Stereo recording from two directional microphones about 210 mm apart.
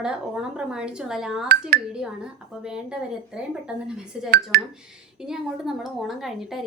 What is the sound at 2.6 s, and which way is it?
A woman's voice, 5° right (ahead or behind).